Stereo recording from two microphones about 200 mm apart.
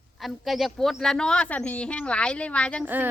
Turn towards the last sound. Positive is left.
turn(degrees=-10)  # may be behind; listen again after turning